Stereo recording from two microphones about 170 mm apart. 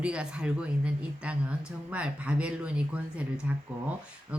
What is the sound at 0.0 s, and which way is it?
Speech, 5° right (ahead or behind).